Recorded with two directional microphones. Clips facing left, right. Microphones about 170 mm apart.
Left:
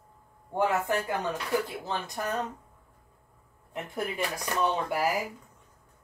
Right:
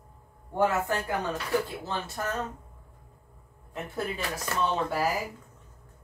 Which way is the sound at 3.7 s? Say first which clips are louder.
Even; 15° left (ahead or behind).